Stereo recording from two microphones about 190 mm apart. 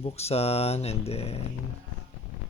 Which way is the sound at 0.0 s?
30° left (ahead or behind).